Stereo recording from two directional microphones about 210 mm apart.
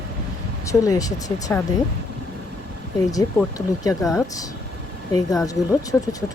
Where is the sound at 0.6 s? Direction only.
15° left (ahead or behind).